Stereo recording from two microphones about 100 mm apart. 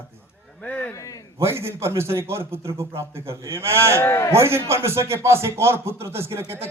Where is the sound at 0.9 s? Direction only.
35° left (ahead or behind).